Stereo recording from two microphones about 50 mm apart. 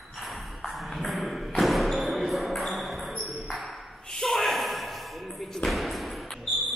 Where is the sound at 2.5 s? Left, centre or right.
Centre.